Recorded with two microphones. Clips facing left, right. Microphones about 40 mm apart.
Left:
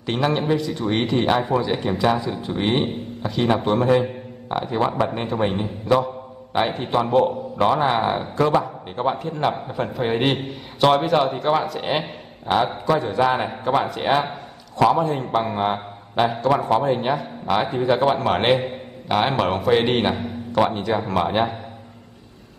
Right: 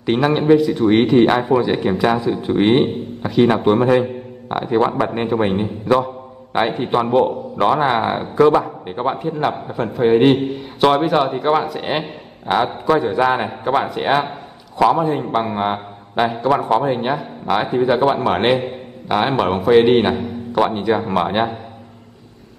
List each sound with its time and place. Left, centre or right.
0.0 s a man's voice: centre
20.5 s a man's voice: centre